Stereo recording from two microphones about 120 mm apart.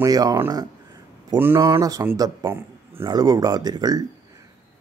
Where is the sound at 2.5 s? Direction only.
20° right (ahead or behind).